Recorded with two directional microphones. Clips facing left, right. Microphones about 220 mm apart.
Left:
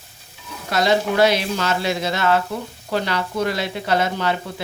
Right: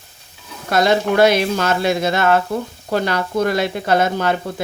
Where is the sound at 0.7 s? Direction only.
50° right (ahead or behind).